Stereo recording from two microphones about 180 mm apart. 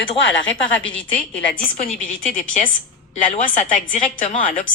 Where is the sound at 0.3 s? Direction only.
90° left.